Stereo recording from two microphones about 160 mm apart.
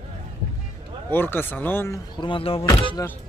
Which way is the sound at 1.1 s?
15° left (ahead or behind).